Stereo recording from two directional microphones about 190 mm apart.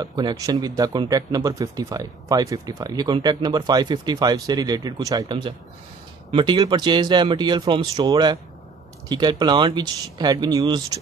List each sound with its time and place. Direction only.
0.0 s speech: 20° right (ahead or behind)